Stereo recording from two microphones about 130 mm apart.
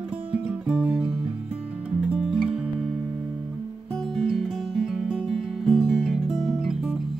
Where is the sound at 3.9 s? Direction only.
5° left (ahead or behind).